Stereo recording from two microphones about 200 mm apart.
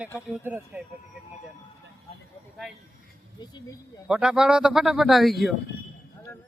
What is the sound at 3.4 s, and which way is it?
Speech, 20° left (ahead or behind).